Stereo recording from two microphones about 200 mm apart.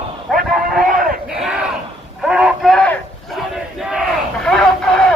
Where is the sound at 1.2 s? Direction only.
5° right (ahead or behind).